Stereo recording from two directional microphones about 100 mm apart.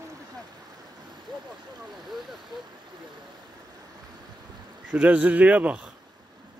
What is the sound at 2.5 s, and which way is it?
Speech, 45° right (ahead or behind).